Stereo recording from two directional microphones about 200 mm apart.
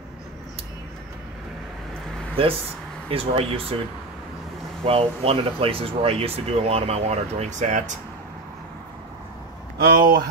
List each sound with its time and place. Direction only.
2.4 s speech: 25° right (ahead or behind)
4.8 s speech: 30° right (ahead or behind)
9.8 s speech: 50° right (ahead or behind)